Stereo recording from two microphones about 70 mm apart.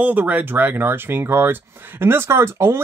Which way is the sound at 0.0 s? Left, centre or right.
Right.